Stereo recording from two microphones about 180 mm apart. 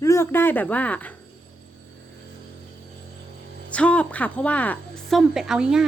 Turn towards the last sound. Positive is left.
turn(degrees=-5)  # may be behind; listen again after turning